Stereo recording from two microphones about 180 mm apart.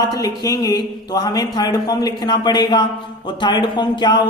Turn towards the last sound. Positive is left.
turn(degrees=25)  # may be behind; listen again after turning